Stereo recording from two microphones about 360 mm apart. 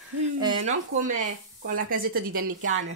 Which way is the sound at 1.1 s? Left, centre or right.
Right.